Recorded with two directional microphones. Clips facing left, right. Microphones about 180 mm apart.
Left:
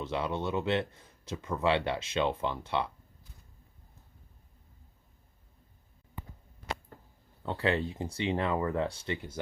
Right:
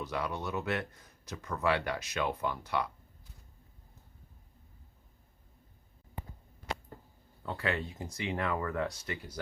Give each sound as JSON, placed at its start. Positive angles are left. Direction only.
{"t": 0.0, "sound": "speech", "side_deg": 25}
{"t": 7.4, "sound": "speech", "side_deg": 30}